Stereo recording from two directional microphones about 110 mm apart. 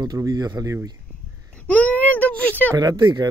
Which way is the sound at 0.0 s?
35° right (ahead or behind).